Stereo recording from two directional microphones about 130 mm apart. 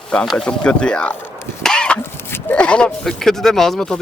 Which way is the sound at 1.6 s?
5° left (ahead or behind).